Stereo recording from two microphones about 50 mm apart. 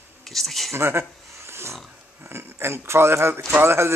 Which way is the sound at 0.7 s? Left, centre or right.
Right.